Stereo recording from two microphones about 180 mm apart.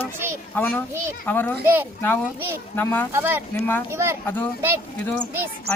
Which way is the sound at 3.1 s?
15° right (ahead or behind).